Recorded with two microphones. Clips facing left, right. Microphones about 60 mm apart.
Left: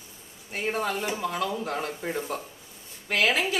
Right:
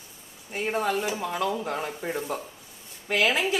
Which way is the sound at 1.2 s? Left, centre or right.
Centre.